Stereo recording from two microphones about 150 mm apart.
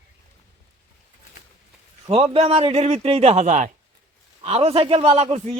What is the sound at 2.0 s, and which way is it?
A man's voice, 40° right (ahead or behind).